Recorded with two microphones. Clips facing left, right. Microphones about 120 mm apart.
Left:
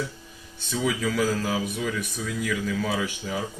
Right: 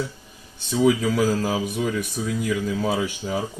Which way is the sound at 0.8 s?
40° right (ahead or behind).